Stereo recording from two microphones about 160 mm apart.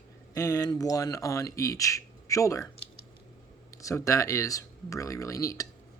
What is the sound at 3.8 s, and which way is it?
Speech, 20° left (ahead or behind).